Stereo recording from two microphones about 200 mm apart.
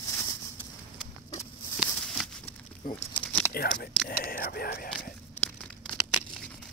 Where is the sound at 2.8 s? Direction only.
45° left (ahead or behind).